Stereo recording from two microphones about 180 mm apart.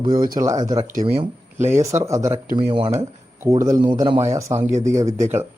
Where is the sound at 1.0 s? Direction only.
35° right (ahead or behind).